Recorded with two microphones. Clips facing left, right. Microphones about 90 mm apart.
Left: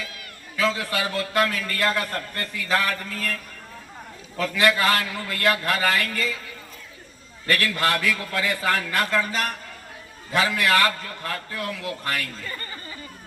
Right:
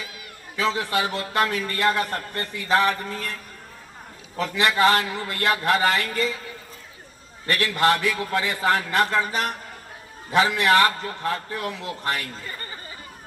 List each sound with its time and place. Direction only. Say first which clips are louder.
0.5 s a man's voice: right 1 dB; 20° right (ahead or behind)
4.4 s a man's voice: even; 20° right (ahead or behind)
7.4 s a man's voice: right 2 dB; 25° right (ahead or behind)